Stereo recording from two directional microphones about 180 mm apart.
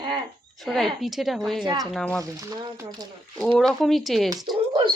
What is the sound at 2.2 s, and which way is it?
Speech, 20° right (ahead or behind).